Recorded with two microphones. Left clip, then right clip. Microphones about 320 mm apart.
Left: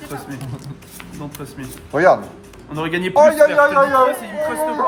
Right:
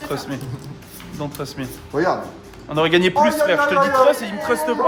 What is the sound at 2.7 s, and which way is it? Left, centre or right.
Speech, right.